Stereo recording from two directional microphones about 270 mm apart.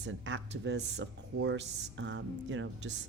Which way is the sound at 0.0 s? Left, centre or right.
Right.